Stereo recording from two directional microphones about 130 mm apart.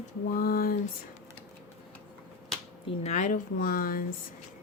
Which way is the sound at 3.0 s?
65° left (ahead or behind).